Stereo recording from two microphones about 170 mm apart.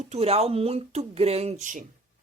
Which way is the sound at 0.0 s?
40° right (ahead or behind).